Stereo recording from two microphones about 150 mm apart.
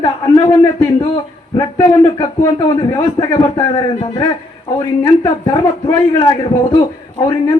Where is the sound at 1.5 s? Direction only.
30° left (ahead or behind).